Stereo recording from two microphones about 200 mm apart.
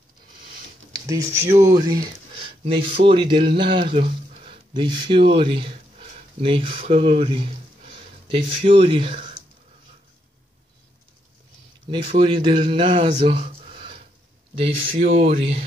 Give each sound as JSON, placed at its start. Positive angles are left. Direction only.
{"t": 0.9, "sound": "speech", "side_deg": -15}
{"t": 8.5, "sound": "speech", "side_deg": -25}
{"t": 11.9, "sound": "speech", "side_deg": -25}
{"t": 13.2, "sound": "a sound", "side_deg": -30}
{"t": 14.5, "sound": "speech", "side_deg": -25}